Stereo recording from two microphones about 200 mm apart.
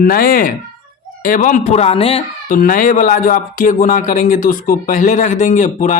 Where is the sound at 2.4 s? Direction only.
45° left (ahead or behind).